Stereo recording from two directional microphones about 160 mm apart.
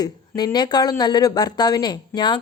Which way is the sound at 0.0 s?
25° left (ahead or behind).